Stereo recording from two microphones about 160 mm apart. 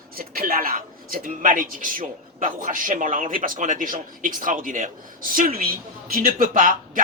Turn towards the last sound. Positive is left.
turn(degrees=-55)  # may be behind; listen again after turning